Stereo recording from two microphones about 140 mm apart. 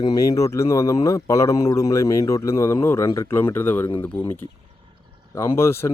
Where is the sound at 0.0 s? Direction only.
25° left (ahead or behind).